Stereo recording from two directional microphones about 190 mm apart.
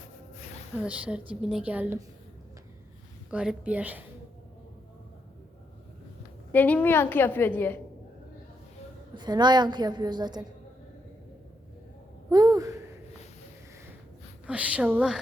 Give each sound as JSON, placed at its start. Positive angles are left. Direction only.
{"t": 0.8, "sound": "a woman's voice", "side_deg": -5}
{"t": 3.2, "sound": "a woman's voice", "side_deg": -5}
{"t": 6.5, "sound": "a woman's voice", "side_deg": 10}
{"t": 9.1, "sound": "a woman's voice", "side_deg": -20}
{"t": 12.3, "sound": "a woman's voice", "side_deg": -20}
{"t": 14.4, "sound": "a woman's voice", "side_deg": -5}